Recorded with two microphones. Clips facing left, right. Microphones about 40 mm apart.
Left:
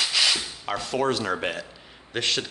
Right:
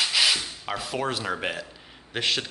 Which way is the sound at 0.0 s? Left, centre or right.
Centre.